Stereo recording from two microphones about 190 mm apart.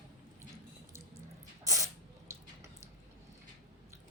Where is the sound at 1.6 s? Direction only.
15° right (ahead or behind).